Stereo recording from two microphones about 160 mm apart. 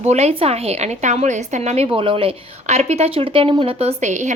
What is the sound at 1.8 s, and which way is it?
A woman's voice, 30° right (ahead or behind).